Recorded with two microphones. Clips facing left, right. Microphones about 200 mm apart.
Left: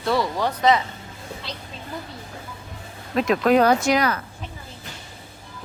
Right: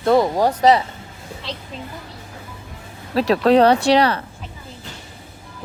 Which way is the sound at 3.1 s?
35° right (ahead or behind).